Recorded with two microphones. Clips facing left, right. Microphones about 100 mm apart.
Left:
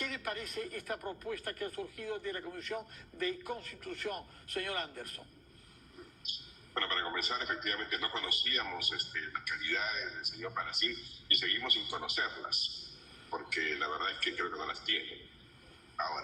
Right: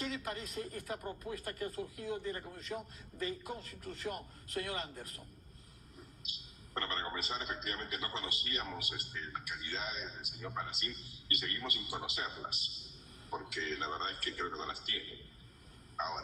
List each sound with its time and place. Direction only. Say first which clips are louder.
0.0 s a man's voice: even; 25° right (ahead or behind)
6.7 s a man's voice: left 2 dB; 25° right (ahead or behind)